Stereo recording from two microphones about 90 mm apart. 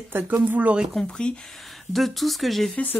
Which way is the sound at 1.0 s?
10° left (ahead or behind).